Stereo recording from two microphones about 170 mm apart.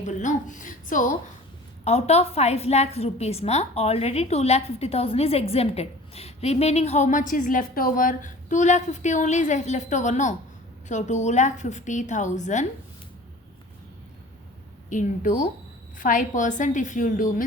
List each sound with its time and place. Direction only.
0.0 s a woman's voice: 45° left (ahead or behind)
1.8 s a woman's voice: 40° left (ahead or behind)
14.8 s a woman's voice: 50° left (ahead or behind)